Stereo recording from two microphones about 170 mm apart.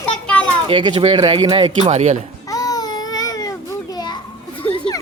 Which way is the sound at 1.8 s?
40° right (ahead or behind).